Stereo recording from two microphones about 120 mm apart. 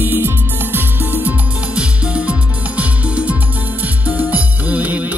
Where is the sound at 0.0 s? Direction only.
20° right (ahead or behind).